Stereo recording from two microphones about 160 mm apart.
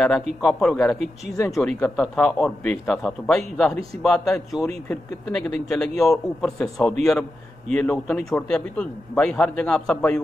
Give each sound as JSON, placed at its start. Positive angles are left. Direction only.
{"t": 0.4, "sound": "a man's voice", "side_deg": 5}
{"t": 0.9, "sound": "speech", "side_deg": -45}
{"t": 1.5, "sound": "a man's voice", "side_deg": 5}